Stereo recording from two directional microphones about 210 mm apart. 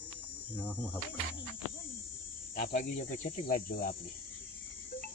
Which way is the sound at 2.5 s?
40° left (ahead or behind).